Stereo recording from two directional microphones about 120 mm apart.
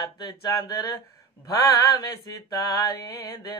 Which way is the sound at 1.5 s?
35° left (ahead or behind).